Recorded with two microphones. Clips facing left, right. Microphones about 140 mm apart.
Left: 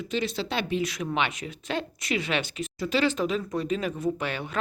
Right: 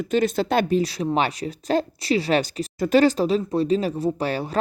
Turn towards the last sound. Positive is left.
turn(degrees=-35)  # may be behind; listen again after turning